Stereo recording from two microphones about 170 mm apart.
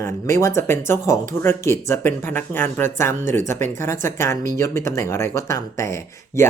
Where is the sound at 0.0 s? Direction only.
15° left (ahead or behind).